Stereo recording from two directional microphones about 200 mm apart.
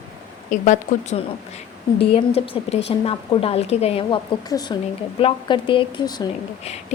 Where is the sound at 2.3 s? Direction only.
30° left (ahead or behind).